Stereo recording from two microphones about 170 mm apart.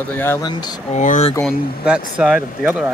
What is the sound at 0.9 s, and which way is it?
Speech, 45° left (ahead or behind).